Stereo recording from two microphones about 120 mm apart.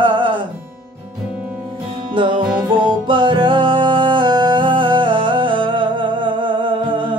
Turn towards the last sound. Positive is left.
turn(degrees=-45)  # may be behind; listen again after turning